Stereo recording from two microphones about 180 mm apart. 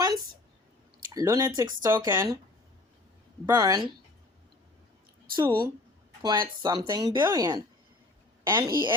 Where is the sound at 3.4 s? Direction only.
20° right (ahead or behind).